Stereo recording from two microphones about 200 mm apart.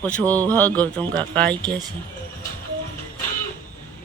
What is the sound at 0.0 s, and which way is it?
Speech, 10° left (ahead or behind).